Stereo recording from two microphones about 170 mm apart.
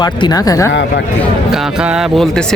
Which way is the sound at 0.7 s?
90° left.